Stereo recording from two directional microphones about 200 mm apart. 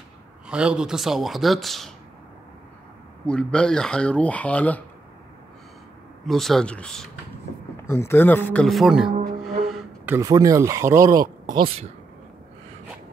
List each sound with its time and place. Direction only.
0.5 s speech: 5° right (ahead or behind)
3.3 s speech: 5° left (ahead or behind)
6.2 s a man's voice: centre (ahead or behind)
9.7 s a sound: centre (ahead or behind)
10.1 s speech: 15° right (ahead or behind)